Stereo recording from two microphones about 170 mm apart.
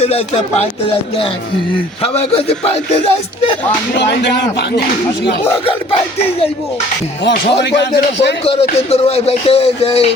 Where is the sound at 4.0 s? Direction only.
75° left (ahead or behind).